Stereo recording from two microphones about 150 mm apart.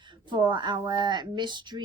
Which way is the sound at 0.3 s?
30° right (ahead or behind).